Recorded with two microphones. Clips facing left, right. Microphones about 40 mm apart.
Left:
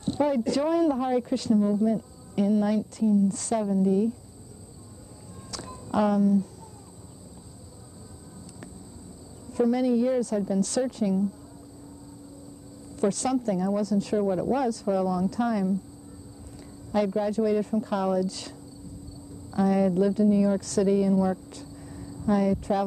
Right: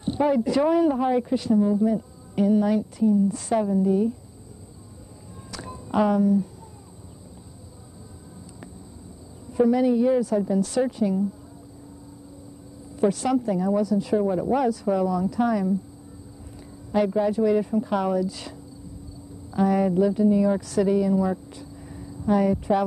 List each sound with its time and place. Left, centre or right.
0.0 s speech: centre
5.5 s a sound: centre
9.5 s speech: centre
13.0 s speech: centre
16.9 s speech: centre
19.5 s speech: centre